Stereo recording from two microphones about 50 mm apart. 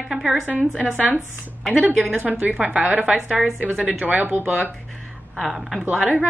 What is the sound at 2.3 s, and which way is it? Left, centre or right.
A woman's voice, right.